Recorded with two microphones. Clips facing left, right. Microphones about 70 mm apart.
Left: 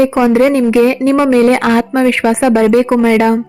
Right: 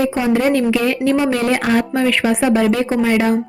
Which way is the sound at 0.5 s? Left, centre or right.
Left.